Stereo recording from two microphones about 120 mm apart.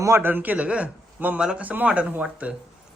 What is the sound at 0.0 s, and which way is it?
A man's voice, 20° right (ahead or behind).